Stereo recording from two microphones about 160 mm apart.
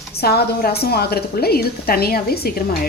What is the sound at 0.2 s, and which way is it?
A woman's voice, 80° left.